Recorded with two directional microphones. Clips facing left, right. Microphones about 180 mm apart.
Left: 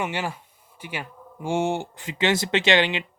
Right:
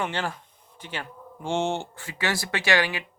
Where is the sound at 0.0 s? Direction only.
10° left (ahead or behind).